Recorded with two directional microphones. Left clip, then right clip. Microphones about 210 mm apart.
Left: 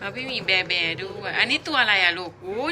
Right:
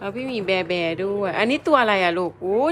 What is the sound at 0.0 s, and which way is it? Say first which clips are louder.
Speech: right 1 dB; 20° right (ahead or behind).